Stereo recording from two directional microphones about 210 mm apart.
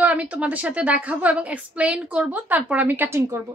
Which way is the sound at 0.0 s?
5° right (ahead or behind).